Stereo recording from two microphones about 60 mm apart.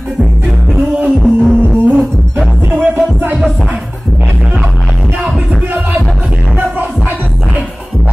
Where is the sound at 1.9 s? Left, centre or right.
Right.